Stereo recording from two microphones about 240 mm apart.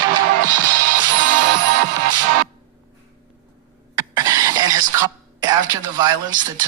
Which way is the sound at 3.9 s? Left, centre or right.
Centre.